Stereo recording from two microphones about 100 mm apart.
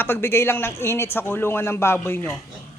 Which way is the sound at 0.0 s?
25° left (ahead or behind).